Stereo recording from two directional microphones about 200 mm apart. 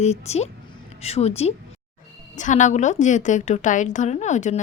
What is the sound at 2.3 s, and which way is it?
A woman's voice, 40° left (ahead or behind).